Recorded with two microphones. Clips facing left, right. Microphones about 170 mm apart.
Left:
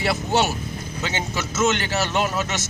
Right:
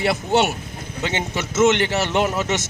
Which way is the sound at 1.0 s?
60° right (ahead or behind).